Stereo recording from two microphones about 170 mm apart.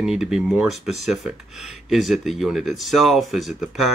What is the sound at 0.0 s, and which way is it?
Speech, 5° right (ahead or behind).